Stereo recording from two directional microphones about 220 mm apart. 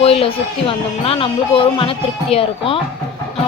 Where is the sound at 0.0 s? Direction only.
25° left (ahead or behind).